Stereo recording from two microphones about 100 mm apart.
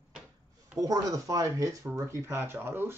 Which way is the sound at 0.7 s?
35° right (ahead or behind).